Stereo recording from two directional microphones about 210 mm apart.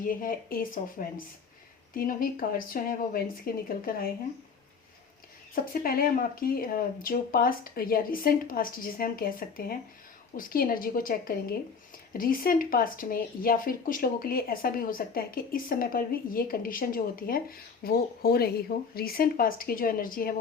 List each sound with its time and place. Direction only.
0.0 s speech: 40° left (ahead or behind)
5.5 s speech: 45° left (ahead or behind)